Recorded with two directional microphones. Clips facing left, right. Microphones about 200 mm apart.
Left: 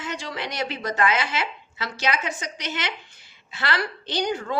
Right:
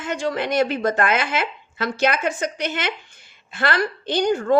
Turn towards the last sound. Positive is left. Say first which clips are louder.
# right 8 dB
turn(degrees=-50)  # may be behind; listen again after turning